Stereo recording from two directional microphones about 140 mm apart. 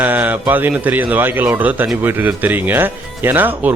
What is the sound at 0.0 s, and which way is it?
A man's voice, 10° right (ahead or behind).